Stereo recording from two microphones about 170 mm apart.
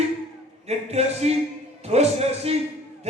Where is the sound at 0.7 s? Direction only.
40° right (ahead or behind).